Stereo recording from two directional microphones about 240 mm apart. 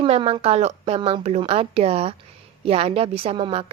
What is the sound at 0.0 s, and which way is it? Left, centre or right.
A woman's voice, right.